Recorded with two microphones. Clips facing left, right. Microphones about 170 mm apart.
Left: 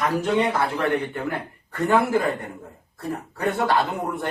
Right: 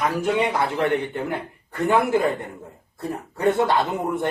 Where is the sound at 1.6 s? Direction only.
20° right (ahead or behind).